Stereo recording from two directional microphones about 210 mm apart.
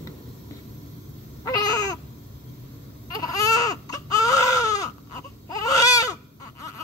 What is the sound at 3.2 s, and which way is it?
Baby cry, 15° left (ahead or behind).